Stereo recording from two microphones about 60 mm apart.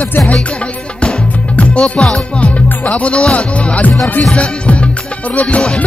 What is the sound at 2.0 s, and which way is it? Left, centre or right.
Music, centre.